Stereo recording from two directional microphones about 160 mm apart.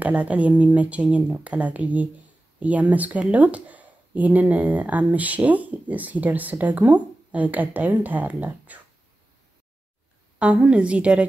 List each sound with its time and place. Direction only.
0.0 s speech: 10° right (ahead or behind)
10.4 s speech: 5° right (ahead or behind)